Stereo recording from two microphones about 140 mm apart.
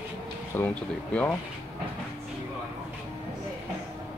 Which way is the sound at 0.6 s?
15° left (ahead or behind).